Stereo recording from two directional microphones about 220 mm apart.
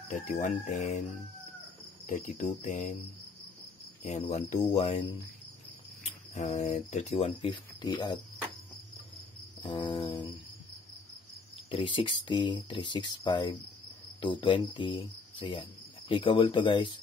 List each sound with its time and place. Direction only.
0.1 s speech: 30° left (ahead or behind)
4.6 s speech: 25° left (ahead or behind)
6.3 s speech: 35° left (ahead or behind)
9.6 s speech: 25° left (ahead or behind)
11.5 s speech: 25° left (ahead or behind)